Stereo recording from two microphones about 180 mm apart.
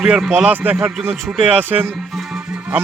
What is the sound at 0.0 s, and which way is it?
A man's voice, centre (ahead or behind).